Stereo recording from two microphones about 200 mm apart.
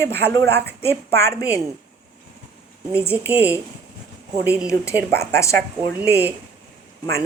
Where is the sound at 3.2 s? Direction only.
10° right (ahead or behind).